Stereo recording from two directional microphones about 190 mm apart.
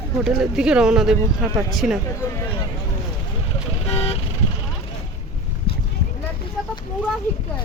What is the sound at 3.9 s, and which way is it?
Vehicle, 30° left (ahead or behind).